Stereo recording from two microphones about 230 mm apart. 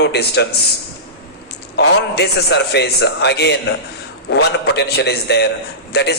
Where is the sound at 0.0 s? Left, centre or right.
Left.